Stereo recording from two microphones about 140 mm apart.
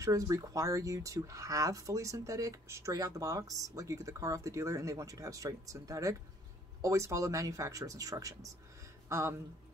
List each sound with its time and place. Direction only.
0.0 s speech: 25° right (ahead or behind)